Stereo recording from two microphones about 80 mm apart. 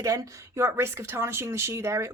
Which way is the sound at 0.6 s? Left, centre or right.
Right.